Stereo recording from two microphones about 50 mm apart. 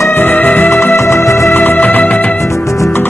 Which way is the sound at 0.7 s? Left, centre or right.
Left.